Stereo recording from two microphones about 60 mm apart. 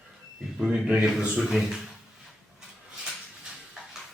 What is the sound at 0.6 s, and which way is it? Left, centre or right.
Speech, centre.